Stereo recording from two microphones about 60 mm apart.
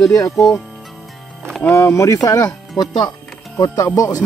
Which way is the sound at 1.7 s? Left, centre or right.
Left.